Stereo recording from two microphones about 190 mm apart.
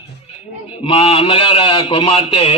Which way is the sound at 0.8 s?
30° left (ahead or behind).